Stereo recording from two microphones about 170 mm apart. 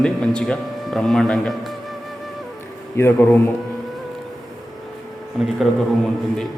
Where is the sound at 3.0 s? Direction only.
15° left (ahead or behind).